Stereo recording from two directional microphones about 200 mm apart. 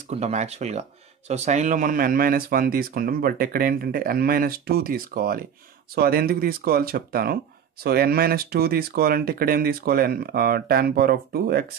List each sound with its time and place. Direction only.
0.1 s speech: 35° right (ahead or behind); by 11.6 s 50° right (ahead or behind)